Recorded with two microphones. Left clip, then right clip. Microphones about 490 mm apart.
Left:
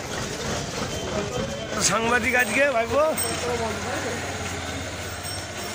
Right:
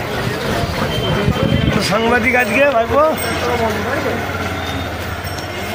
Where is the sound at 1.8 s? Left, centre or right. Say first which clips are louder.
Right 6 dB; left.